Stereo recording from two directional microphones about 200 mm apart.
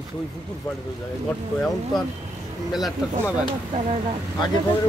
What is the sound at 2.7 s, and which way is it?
Speech, centre (ahead or behind).